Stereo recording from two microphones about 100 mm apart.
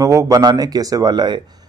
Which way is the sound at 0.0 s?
35° right (ahead or behind).